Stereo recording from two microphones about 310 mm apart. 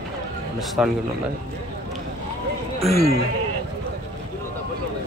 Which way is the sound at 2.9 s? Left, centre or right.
Right.